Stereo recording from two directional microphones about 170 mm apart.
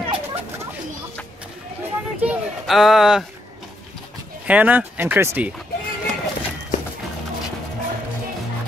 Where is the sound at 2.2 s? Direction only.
5° right (ahead or behind).